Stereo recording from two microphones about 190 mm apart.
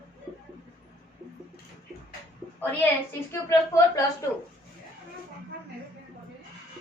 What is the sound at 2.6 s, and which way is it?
Speech, 10° left (ahead or behind).